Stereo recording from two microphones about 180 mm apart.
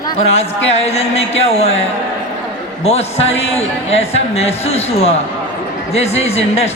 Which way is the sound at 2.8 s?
35° left (ahead or behind).